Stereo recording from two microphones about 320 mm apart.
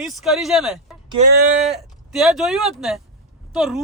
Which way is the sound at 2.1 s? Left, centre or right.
Centre.